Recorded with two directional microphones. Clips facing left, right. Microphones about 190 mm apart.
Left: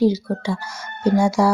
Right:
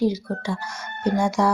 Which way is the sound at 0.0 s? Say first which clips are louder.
Left 4 dB; 30° left (ahead or behind).